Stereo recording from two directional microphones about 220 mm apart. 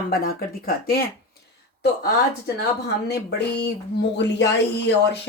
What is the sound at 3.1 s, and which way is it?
Speech, 50° left (ahead or behind).